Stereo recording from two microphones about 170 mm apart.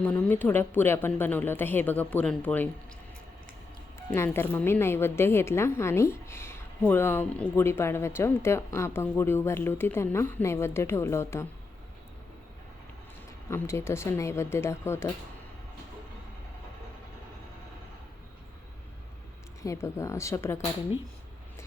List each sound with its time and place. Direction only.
0.0 s a woman's voice: 10° left (ahead or behind)
4.1 s a woman's voice: 15° left (ahead or behind)
13.5 s a woman's voice: 15° left (ahead or behind)
19.6 s a woman's voice: 15° left (ahead or behind)